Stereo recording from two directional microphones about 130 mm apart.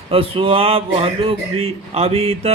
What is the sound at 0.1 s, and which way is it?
Speech, 45° right (ahead or behind).